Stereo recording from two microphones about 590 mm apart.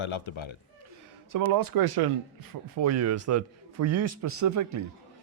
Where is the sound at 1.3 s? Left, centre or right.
Right.